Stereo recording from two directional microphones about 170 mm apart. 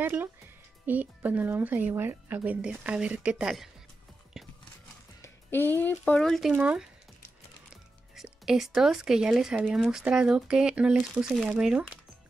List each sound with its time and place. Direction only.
0.0 s speech: 10° right (ahead or behind)
4.4 s a sound: centre (ahead or behind)
5.2 s speech: 10° left (ahead or behind)
6.5 s speech: 10° right (ahead or behind)